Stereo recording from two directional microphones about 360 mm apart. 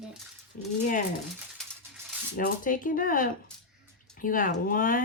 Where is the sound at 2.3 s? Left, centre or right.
Left.